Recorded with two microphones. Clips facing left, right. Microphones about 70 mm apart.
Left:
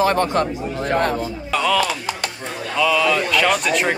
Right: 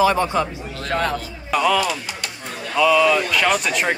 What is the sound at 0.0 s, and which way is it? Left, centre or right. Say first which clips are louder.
Speech: even; left.